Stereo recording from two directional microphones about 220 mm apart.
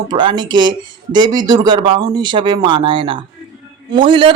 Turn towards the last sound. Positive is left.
turn(degrees=-20)  # may be behind; listen again after turning